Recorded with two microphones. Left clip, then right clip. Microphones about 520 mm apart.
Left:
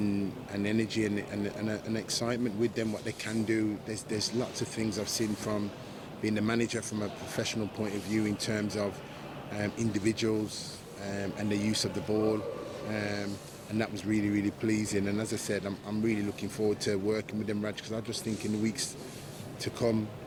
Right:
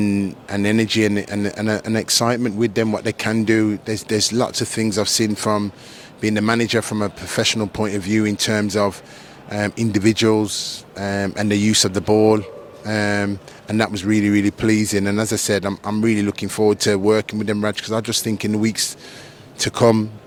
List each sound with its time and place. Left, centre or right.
0.0 s speech: right